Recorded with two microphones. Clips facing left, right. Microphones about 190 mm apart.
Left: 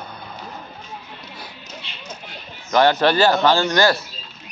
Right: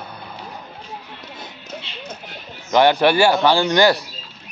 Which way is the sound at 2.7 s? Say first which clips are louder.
Right 1 dB; 15° right (ahead or behind).